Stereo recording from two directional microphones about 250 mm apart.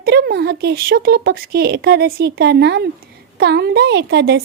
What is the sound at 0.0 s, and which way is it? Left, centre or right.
Speech, right.